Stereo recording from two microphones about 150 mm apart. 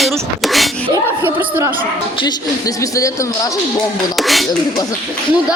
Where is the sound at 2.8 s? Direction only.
20° left (ahead or behind).